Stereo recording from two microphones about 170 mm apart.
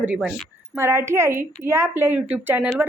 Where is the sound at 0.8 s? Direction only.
15° right (ahead or behind).